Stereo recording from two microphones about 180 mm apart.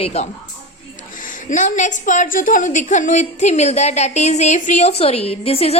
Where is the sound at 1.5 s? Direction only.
45° left (ahead or behind).